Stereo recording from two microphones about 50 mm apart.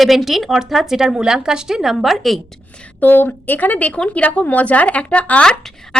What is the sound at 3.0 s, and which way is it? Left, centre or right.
A woman's voice, left.